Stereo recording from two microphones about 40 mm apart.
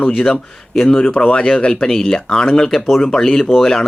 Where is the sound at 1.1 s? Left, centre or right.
Left.